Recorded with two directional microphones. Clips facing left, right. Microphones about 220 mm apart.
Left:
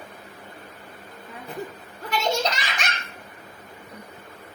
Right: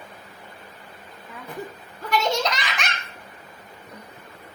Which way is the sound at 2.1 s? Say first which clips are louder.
Right 1 dB; 30° left (ahead or behind).